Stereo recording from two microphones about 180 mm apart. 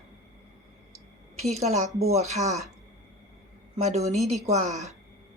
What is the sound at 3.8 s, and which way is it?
Speech, 35° right (ahead or behind).